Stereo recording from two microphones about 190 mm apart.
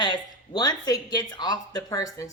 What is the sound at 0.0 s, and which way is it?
A woman's voice, 20° left (ahead or behind).